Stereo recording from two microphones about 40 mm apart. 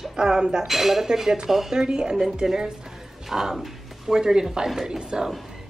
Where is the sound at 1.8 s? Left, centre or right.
Centre.